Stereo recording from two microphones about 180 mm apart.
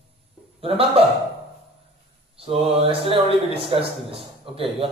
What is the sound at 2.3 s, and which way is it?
Speech, 30° right (ahead or behind).